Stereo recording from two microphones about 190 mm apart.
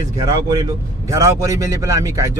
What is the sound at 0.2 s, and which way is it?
Speech, 20° right (ahead or behind).